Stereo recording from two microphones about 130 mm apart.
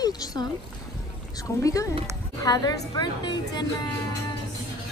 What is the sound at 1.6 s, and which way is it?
A woman's voice, 25° left (ahead or behind).